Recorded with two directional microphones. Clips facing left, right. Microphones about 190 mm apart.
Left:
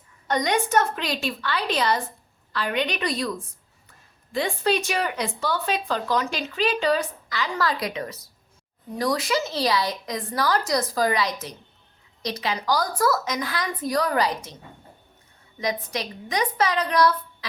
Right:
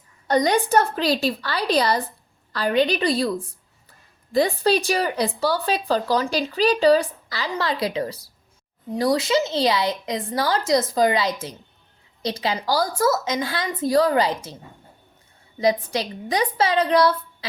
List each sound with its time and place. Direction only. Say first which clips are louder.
0.3 s speech: right 4 dB; 35° right (ahead or behind)
7.5 s a woman's voice: right 3 dB; 25° right (ahead or behind)
15.6 s a woman's voice: right 7 dB; 30° right (ahead or behind)